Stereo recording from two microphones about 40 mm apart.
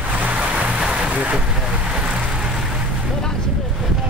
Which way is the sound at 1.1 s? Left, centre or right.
Right.